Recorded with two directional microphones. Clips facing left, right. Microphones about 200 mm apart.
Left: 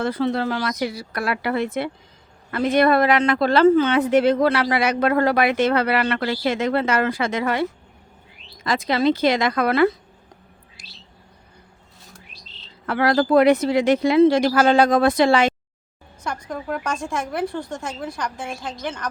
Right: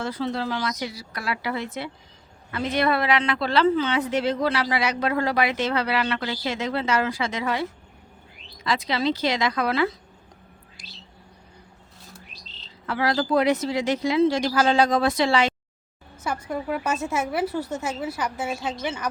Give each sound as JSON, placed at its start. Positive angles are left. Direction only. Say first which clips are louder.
{"t": 0.0, "sound": "a woman's voice", "louder": "left 5 dB", "side_deg": 55}
{"t": 12.8, "sound": "speech", "louder": "left 5 dB", "side_deg": 55}
{"t": 16.2, "sound": "a woman's voice", "louder": "right 1 dB", "side_deg": -5}